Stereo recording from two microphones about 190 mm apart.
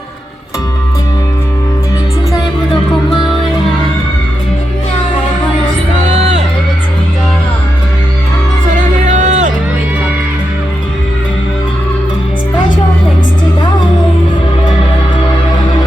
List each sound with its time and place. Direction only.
6.1 s music: 40° right (ahead or behind)
9.0 s music: 40° right (ahead or behind)